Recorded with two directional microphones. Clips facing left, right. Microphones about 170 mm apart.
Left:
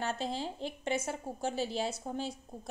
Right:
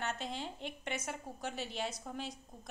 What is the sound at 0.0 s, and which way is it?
A woman's voice, 35° left (ahead or behind).